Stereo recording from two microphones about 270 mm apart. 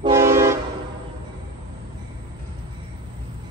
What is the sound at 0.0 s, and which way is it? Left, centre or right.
Train, centre.